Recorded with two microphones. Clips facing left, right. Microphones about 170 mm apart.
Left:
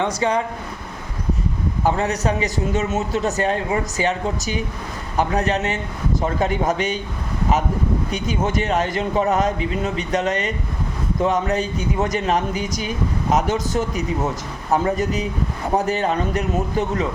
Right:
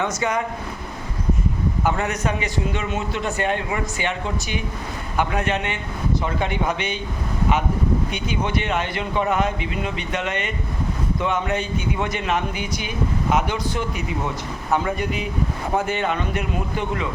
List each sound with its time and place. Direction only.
0.0 s a man's voice: 30° left (ahead or behind)
1.8 s a man's voice: 35° left (ahead or behind)
8.1 s a man's voice: 45° left (ahead or behind)